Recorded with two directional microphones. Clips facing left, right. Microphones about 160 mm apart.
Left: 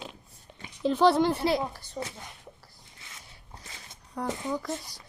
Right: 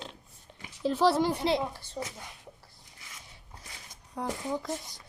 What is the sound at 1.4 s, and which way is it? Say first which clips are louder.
Speech: left 1 dB; 25° right (ahead or behind).